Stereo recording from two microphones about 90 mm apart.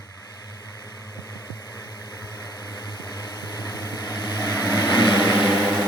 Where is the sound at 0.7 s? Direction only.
45° left (ahead or behind).